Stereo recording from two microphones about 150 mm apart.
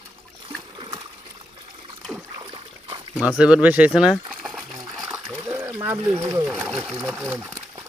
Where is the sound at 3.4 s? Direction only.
5° right (ahead or behind).